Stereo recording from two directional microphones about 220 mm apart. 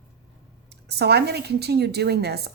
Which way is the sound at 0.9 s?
50° right (ahead or behind).